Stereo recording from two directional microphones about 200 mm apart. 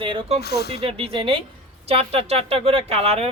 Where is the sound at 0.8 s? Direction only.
30° right (ahead or behind).